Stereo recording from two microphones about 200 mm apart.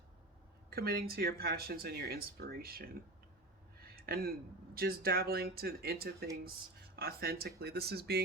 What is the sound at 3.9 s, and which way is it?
Speech, 50° right (ahead or behind).